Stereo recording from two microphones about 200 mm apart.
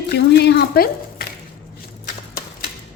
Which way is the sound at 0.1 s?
55° left (ahead or behind).